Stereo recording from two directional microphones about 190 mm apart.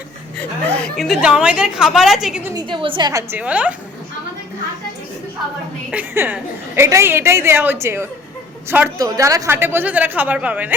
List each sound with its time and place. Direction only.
0.8 s a woman's voice: centre (ahead or behind)
2.6 s a woman's voice: 25° right (ahead or behind); by 3.8 s 5° right (ahead or behind)
5.9 s a woman's voice: 10° right (ahead or behind)